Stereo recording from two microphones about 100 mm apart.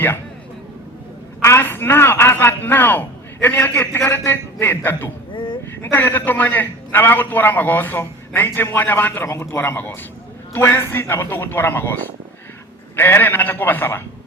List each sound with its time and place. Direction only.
1.4 s a man's voice: 25° left (ahead or behind)
5.3 s a sound: 50° left (ahead or behind)
5.8 s a man's voice: 20° left (ahead or behind)